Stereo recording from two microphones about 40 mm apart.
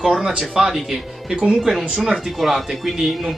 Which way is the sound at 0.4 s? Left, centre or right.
Centre.